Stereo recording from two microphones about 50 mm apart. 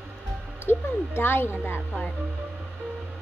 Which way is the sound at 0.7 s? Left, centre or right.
Left.